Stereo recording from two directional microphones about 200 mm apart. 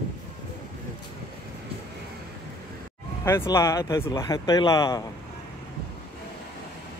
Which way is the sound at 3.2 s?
15° left (ahead or behind).